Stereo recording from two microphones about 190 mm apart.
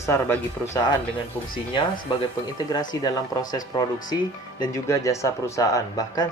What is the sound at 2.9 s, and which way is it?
Speech, 20° left (ahead or behind).